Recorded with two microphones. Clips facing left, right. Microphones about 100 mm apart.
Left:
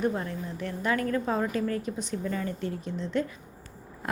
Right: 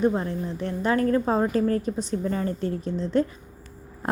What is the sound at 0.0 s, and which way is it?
A woman's voice, 30° right (ahead or behind).